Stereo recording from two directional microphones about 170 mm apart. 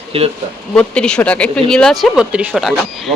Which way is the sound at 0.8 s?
5° left (ahead or behind).